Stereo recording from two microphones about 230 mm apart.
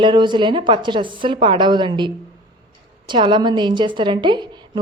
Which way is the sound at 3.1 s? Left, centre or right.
Centre.